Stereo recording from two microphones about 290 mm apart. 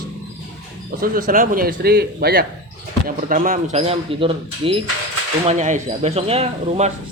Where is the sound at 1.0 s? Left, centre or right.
Right.